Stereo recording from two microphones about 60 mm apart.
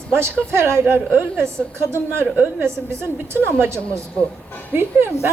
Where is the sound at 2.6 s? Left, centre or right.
Right.